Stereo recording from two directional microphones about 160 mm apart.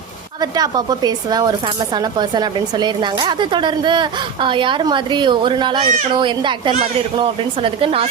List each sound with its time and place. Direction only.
0.5 s speech: 25° right (ahead or behind)